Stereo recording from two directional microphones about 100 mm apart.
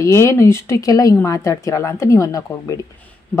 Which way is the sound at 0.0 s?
30° left (ahead or behind).